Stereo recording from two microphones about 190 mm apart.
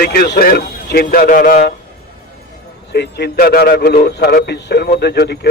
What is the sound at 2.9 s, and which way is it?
A man's voice, 60° left (ahead or behind).